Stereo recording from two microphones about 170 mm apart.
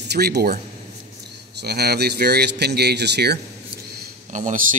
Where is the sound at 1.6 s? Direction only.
70° right (ahead or behind).